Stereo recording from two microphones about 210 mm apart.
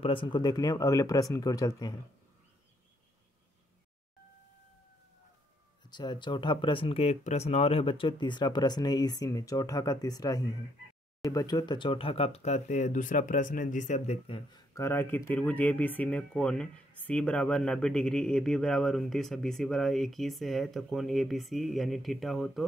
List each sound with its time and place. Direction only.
0.0 s speech: 25° left (ahead or behind)
5.9 s speech: 20° left (ahead or behind); by 22.7 s centre (ahead or behind)